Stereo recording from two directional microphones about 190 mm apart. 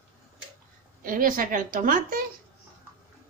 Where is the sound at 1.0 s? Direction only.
50° right (ahead or behind).